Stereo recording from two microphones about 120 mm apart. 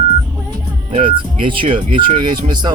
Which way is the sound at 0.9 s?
45° right (ahead or behind).